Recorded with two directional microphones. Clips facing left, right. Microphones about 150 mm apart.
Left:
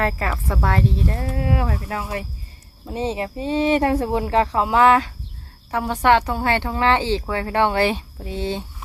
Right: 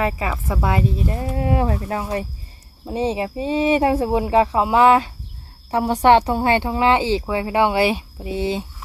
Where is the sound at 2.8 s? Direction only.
15° right (ahead or behind).